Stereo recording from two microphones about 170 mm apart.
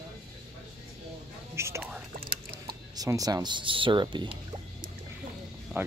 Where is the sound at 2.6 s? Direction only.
20° right (ahead or behind).